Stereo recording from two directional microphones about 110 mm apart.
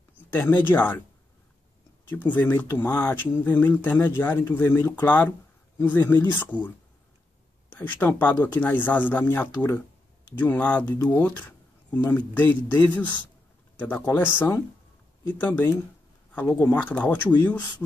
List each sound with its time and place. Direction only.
0.3 s speech: 15° left (ahead or behind)
2.0 s speech: 15° left (ahead or behind)
7.7 s speech: 15° left (ahead or behind)